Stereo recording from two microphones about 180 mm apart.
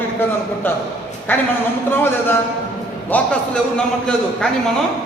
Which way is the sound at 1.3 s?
10° left (ahead or behind).